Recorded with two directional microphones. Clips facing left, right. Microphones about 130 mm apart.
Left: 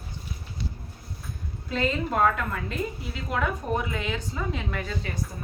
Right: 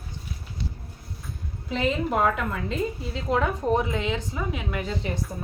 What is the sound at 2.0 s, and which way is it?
A woman's voice, 15° right (ahead or behind).